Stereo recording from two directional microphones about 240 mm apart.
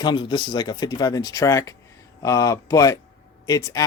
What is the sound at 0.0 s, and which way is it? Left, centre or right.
Speech, centre.